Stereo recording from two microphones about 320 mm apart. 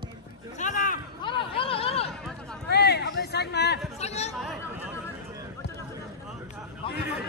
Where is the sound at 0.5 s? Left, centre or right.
Left.